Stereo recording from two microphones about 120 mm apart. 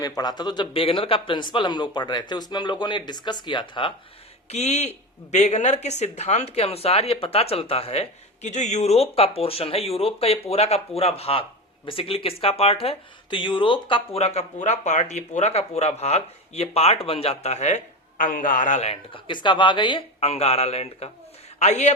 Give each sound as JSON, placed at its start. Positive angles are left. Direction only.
{"t": 0.0, "sound": "speech", "side_deg": 30}
{"t": 4.4, "sound": "speech", "side_deg": 65}
{"t": 14.2, "sound": "speech", "side_deg": 65}
{"t": 19.1, "sound": "speech", "side_deg": 40}
{"t": 20.1, "sound": "speech", "side_deg": 60}
{"t": 21.6, "sound": "a man's voice", "side_deg": 70}